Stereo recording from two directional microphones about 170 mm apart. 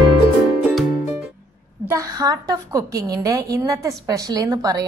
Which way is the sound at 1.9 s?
20° right (ahead or behind).